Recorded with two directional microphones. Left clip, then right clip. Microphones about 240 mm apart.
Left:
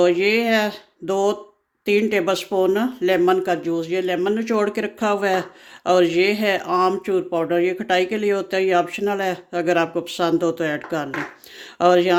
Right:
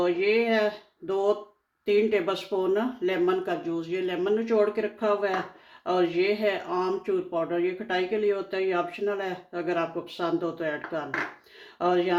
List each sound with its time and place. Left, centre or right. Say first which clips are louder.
0.0 s speech: left 6 dB; left